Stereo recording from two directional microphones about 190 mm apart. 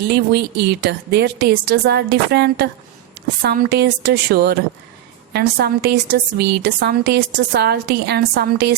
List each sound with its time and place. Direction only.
0.1 s a woman's voice: 60° right (ahead or behind)